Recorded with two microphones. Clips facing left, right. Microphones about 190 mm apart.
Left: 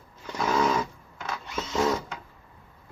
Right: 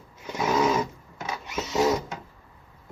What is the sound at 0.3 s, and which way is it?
Sewing machine, 15° right (ahead or behind).